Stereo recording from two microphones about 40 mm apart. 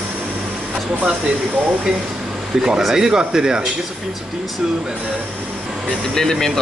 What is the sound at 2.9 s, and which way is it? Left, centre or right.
Speech, centre.